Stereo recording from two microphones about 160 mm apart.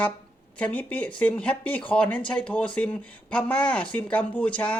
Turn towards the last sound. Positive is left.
turn(degrees=5)  # may be behind; listen again after turning